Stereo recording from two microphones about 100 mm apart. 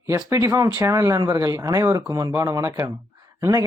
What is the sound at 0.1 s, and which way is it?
Speech, 30° right (ahead or behind).